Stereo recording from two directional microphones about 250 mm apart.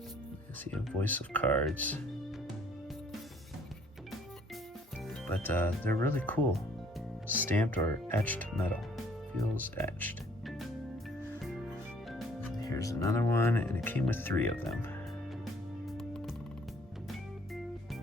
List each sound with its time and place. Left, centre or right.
0.7 s speech: centre
5.0 s speech: centre
9.7 s music: centre
12.5 s speech: centre